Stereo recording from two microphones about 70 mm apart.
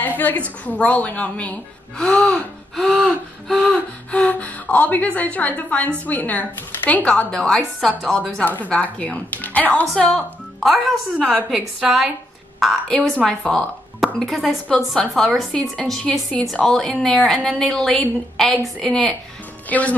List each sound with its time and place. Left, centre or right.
0.3 s a woman's voice: left; by 3.7 s centre
4.1 s a woman's voice: left
8.5 s a woman's voice: left
10.1 s a woman's voice: centre; by 20.0 s left